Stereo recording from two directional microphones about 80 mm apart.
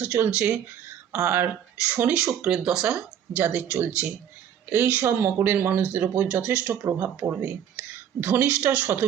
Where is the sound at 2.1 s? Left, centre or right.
Centre.